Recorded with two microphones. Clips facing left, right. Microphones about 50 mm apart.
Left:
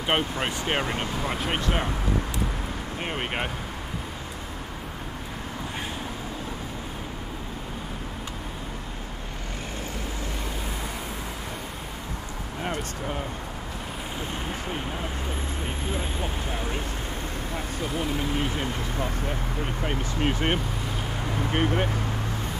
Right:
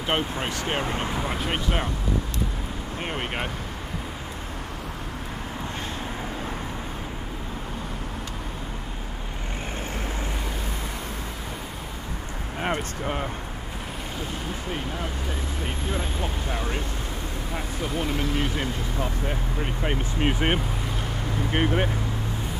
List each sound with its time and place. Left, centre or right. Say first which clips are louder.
0.4 s speech: left 1 dB; left
1.2 s speech: even; centre
3.0 s speech: even; centre
12.6 s speech: right 3 dB; right
19.8 s speech: right 2 dB; centre